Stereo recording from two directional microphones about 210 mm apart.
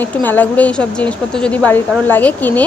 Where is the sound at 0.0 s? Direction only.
10° left (ahead or behind).